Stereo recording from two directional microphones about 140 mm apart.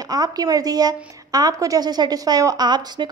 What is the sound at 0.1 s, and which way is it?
A woman's voice, 30° right (ahead or behind).